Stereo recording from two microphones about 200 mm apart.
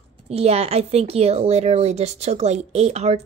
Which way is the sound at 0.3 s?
30° right (ahead or behind).